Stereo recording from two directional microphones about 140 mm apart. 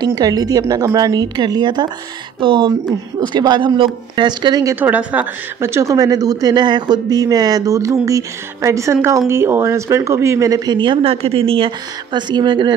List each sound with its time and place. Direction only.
0.0 s speech: 25° right (ahead or behind)
4.7 s speech: 10° right (ahead or behind); by 12.7 s 35° right (ahead or behind)